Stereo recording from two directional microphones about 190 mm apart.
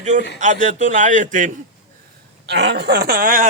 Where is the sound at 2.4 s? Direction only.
65° right (ahead or behind); by 3.5 s 45° right (ahead or behind).